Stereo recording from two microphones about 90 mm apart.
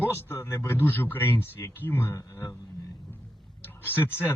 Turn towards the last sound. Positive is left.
turn(degrees=25)  # may be behind; listen again after turning